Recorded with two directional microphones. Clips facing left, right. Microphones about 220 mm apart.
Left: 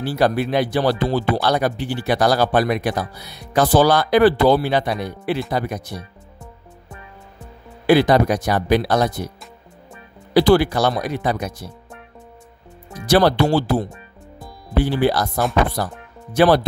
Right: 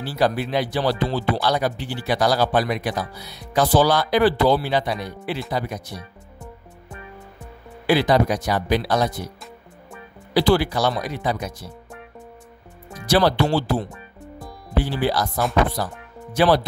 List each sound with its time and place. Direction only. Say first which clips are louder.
0.0 s speech: left 3 dB; 55° left (ahead or behind)
7.8 s speech: left 4 dB; 55° left (ahead or behind)
10.5 s speech: left 2 dB; 55° left (ahead or behind)
13.1 s speech: left 3 dB; 50° left (ahead or behind)